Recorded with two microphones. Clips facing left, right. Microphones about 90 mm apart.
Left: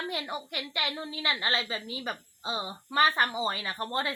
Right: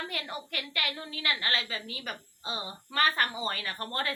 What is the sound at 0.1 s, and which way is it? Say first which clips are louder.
A woman's voice: left 3 dB; 20° left (ahead or behind).